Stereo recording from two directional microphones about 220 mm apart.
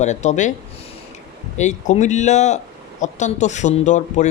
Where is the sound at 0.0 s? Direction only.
30° left (ahead or behind).